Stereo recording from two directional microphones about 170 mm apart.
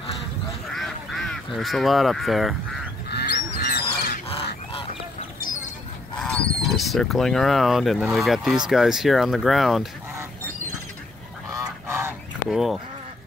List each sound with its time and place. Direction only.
0.7 s duck: centre (ahead or behind)
1.6 s speech: centre (ahead or behind)
3.1 s goose: 75° left (ahead or behind)
6.2 s speech: 5° left (ahead or behind)
11.5 s goose: 15° right (ahead or behind)
12.4 s speech: centre (ahead or behind)